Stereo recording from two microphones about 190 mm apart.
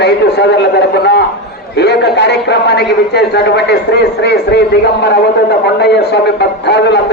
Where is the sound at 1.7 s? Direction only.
60° left (ahead or behind).